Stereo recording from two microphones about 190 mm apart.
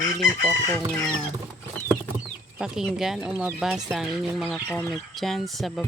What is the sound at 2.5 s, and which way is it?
Speech, 5° right (ahead or behind).